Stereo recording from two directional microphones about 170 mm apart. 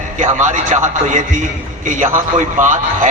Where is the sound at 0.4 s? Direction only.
45° right (ahead or behind).